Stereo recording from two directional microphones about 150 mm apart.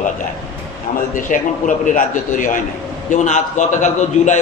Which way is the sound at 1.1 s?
60° left (ahead or behind).